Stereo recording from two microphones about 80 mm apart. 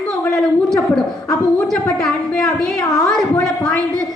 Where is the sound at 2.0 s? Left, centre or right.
Centre.